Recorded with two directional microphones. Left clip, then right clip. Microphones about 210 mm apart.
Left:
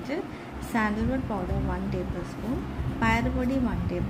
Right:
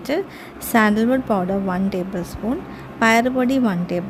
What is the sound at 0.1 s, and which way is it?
A woman's voice, 55° right (ahead or behind).